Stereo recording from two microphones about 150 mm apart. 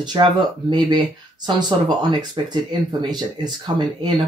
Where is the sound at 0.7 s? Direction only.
30° right (ahead or behind).